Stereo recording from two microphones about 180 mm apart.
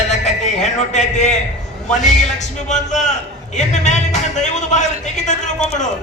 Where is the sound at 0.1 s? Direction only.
40° left (ahead or behind).